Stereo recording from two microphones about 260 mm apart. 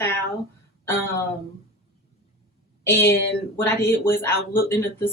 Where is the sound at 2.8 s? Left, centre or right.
Centre.